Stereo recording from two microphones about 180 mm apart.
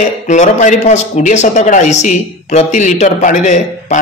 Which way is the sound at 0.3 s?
40° left (ahead or behind).